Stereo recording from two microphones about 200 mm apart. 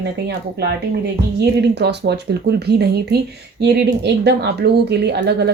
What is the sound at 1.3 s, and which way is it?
Speech, 55° right (ahead or behind).